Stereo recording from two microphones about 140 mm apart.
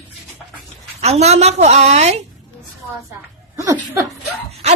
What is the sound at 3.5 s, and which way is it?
Speech, 20° right (ahead or behind).